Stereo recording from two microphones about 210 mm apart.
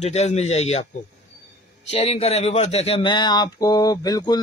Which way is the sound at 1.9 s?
30° left (ahead or behind).